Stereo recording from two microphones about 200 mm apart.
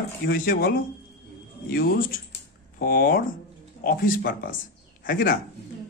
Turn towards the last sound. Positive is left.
turn(degrees=45)  # may be behind; listen again after turning